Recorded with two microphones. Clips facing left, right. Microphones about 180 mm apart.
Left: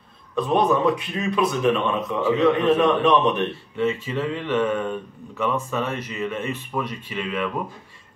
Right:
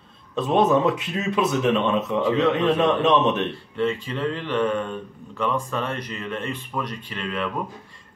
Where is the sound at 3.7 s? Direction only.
5° left (ahead or behind).